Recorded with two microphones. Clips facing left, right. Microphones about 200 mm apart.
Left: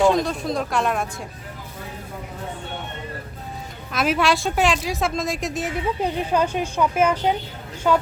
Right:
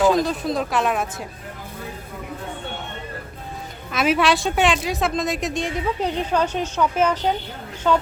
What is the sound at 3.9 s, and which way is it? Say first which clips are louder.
A woman's voice: right 1 dB; centre (ahead or behind).